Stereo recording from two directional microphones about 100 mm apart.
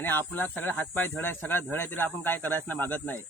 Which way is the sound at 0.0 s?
20° left (ahead or behind).